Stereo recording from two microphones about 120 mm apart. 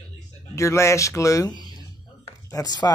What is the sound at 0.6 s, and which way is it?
Speech, 25° left (ahead or behind).